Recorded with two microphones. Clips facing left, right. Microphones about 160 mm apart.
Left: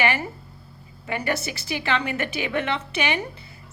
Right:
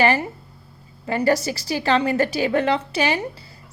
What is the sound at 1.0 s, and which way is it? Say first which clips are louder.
A woman's voice: right 7 dB; 35° right (ahead or behind).